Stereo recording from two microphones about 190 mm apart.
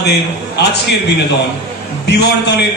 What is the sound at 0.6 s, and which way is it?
Speech, 60° left (ahead or behind).